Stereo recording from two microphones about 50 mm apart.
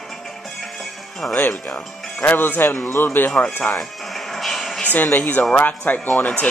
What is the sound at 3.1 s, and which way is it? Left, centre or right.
Speech, left.